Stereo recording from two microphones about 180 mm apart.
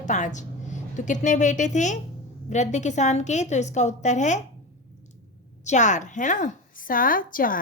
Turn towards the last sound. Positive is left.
turn(degrees=50)  # may be behind; listen again after turning